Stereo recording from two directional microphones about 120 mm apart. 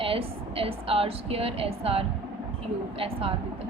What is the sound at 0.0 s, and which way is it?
A woman's voice, 50° right (ahead or behind).